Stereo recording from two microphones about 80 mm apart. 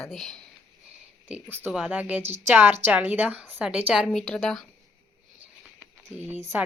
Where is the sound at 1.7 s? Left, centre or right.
Centre.